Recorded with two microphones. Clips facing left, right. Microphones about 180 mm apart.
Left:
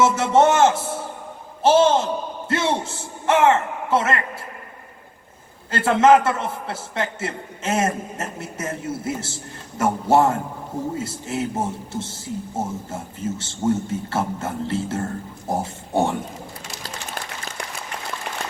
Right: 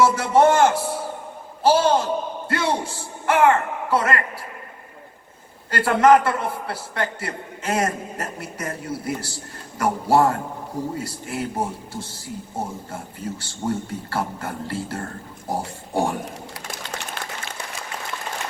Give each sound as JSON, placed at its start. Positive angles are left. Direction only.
{"t": 0.0, "sound": "a man's voice", "side_deg": 25}
{"t": 5.7, "sound": "a man's voice", "side_deg": 25}
{"t": 17.2, "sound": "applause", "side_deg": 45}